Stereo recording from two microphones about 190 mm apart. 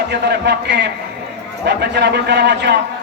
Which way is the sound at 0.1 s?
65° right (ahead or behind).